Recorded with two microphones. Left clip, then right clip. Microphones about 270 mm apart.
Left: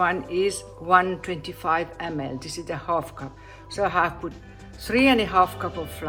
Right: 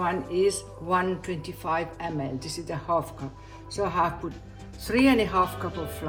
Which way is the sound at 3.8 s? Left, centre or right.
Centre.